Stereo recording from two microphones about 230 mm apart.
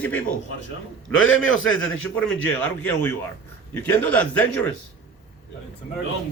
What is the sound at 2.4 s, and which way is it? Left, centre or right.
A man's voice, centre.